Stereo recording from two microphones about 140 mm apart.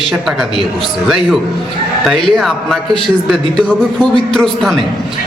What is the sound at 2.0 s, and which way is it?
A man's voice, centre (ahead or behind).